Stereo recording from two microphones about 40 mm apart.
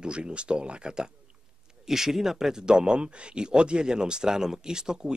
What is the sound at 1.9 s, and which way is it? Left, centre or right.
Speech, centre.